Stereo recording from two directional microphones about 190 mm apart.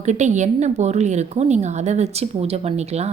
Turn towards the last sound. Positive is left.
turn(degrees=-35)  # may be behind; listen again after turning